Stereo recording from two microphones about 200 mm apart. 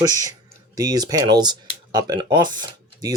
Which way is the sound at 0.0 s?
20° right (ahead or behind).